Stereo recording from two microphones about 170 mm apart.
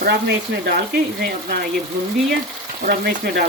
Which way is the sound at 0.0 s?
85° right.